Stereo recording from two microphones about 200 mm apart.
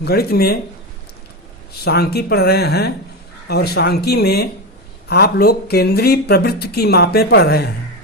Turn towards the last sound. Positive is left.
turn(degrees=50)  # may be behind; listen again after turning